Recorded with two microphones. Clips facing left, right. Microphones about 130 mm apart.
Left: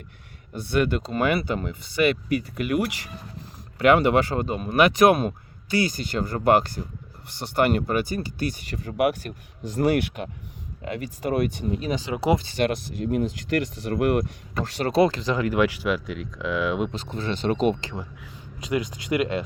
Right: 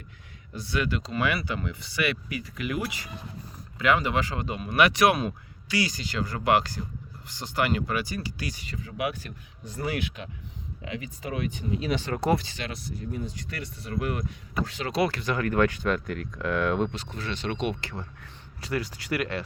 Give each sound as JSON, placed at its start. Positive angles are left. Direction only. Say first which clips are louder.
{"t": 0.5, "sound": "speech", "louder": "left 6 dB", "side_deg": 55}
{"t": 4.4, "sound": "speech", "louder": "left 3 dB", "side_deg": 40}
{"t": 12.0, "sound": "speech", "louder": "left 4 dB", "side_deg": 10}
{"t": 12.5, "sound": "speech", "louder": "left 11 dB", "side_deg": 70}
{"t": 13.9, "sound": "speech", "louder": "left 8 dB", "side_deg": 60}
{"t": 15.0, "sound": "speech", "louder": "left 6 dB", "side_deg": 35}
{"t": 15.4, "sound": "speech", "louder": "left 1 dB", "side_deg": 10}
{"t": 17.1, "sound": "speech", "louder": "left 7 dB", "side_deg": 30}
{"t": 18.6, "sound": "speech", "louder": "left 4 dB", "side_deg": 20}